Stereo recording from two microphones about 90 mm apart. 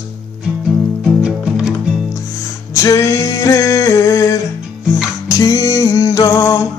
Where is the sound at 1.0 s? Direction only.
5° right (ahead or behind).